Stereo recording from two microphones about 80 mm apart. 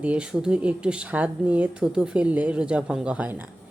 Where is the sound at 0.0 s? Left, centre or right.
Centre.